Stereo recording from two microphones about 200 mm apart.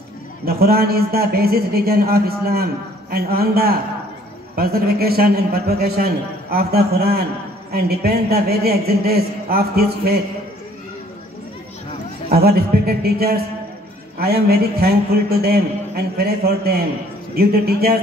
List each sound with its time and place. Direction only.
0.5 s a man's voice: 50° right (ahead or behind)
12.3 s a man's voice: 50° right (ahead or behind)